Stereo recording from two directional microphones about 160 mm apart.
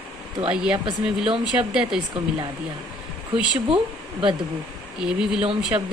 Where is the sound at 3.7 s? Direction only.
35° right (ahead or behind).